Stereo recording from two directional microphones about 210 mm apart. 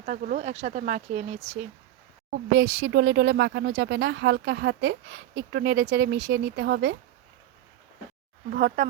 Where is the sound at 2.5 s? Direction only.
55° right (ahead or behind).